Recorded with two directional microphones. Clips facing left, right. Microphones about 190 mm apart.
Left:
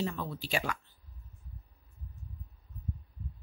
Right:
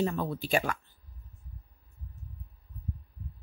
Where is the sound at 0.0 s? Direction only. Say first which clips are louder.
Right 5 dB; 50° right (ahead or behind).